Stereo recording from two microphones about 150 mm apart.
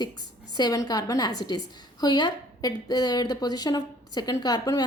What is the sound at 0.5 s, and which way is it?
A woman's voice, 25° left (ahead or behind).